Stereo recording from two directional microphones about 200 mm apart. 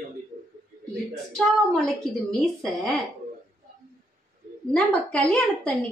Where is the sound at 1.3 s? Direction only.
5° left (ahead or behind).